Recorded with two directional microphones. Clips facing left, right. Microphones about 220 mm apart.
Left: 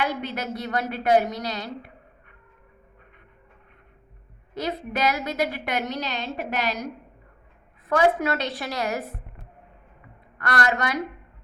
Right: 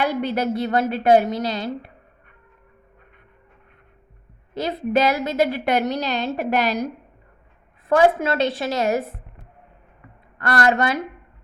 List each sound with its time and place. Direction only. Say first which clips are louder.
0.0 s a woman's voice: right 6 dB; 30° right (ahead or behind)
4.5 s a woman's voice: right 7 dB; 30° right (ahead or behind)
6.3 s a woman's voice: right 6 dB; 40° right (ahead or behind)
7.9 s a woman's voice: right 4 dB; 30° right (ahead or behind)
10.3 s a woman's voice: right 5 dB; 30° right (ahead or behind)